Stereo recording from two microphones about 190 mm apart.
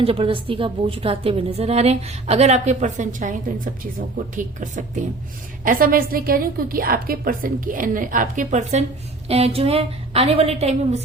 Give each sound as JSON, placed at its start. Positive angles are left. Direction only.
{"t": 0.0, "sound": "a woman's voice", "side_deg": -30}